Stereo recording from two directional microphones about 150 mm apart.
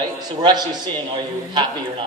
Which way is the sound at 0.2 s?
25° right (ahead or behind).